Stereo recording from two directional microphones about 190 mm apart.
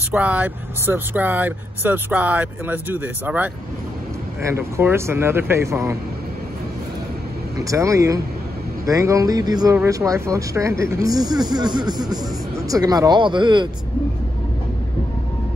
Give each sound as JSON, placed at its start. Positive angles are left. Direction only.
{"t": 0.1, "sound": "speech", "side_deg": -5}
{"t": 4.5, "sound": "speech", "side_deg": -15}
{"t": 7.5, "sound": "speech", "side_deg": -15}